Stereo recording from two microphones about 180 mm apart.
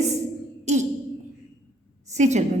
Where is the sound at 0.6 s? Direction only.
40° right (ahead or behind).